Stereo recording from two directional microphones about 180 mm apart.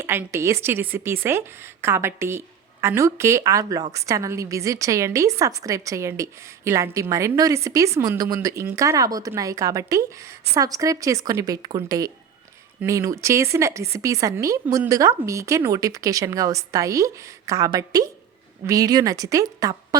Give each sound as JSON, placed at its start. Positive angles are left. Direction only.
{"t": 0.0, "sound": "a woman's voice", "side_deg": -15}